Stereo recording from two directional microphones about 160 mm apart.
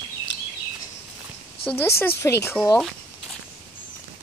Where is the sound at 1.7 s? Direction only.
15° left (ahead or behind).